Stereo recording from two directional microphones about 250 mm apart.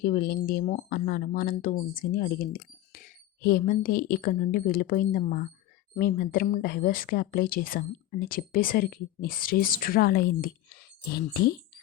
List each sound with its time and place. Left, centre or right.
0.0 s speech: left